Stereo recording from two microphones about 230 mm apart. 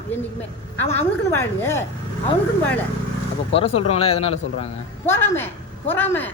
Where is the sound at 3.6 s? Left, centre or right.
Left.